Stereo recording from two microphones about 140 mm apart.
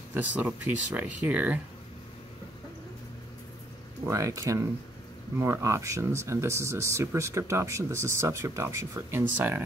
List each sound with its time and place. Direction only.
0.1 s speech: 10° right (ahead or behind)
4.0 s speech: 20° right (ahead or behind)